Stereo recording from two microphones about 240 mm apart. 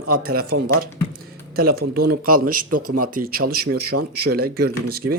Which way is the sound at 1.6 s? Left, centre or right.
Right.